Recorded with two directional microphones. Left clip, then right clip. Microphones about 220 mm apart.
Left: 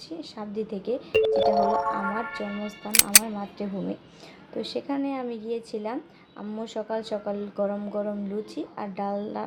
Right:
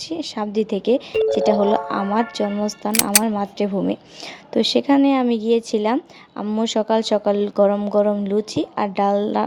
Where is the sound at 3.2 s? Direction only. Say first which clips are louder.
Right 12 dB; 45° right (ahead or behind).